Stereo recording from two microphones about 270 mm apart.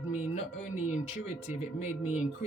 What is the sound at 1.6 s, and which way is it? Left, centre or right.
Speech, left.